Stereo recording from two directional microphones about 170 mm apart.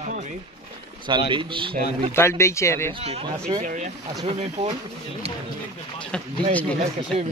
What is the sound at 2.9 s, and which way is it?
Speech, 35° right (ahead or behind).